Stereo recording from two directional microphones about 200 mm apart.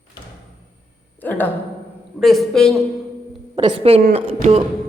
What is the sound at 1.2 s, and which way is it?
A woman's voice, 10° left (ahead or behind).